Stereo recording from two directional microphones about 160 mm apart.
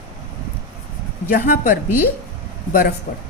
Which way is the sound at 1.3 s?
65° left (ahead or behind).